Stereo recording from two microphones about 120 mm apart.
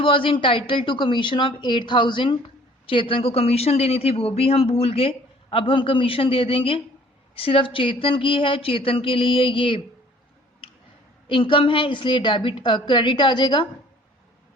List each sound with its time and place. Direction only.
0.0 s speech: 45° left (ahead or behind)
11.3 s a woman's voice: 45° left (ahead or behind)